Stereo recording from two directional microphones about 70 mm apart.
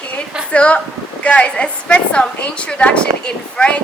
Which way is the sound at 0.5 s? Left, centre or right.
Centre.